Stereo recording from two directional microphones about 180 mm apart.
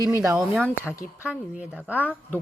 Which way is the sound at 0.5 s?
10° left (ahead or behind).